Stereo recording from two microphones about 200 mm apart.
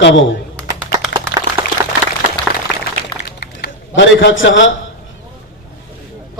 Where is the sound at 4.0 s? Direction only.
70° left (ahead or behind).